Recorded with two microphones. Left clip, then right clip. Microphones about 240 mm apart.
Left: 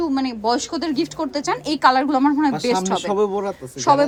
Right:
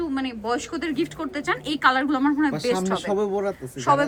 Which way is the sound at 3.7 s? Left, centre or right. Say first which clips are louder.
Left 5 dB; centre.